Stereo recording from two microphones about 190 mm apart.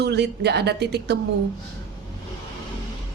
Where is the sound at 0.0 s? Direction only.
60° right (ahead or behind).